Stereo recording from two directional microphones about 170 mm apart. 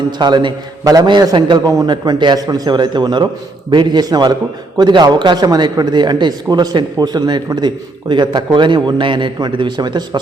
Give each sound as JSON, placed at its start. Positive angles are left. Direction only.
{"t": 0.2, "sound": "a man's voice", "side_deg": -25}